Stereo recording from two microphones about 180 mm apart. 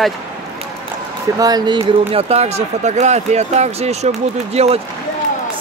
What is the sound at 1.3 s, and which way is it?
Speech, 20° right (ahead or behind).